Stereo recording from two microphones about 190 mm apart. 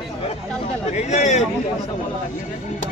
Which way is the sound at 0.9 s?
35° left (ahead or behind).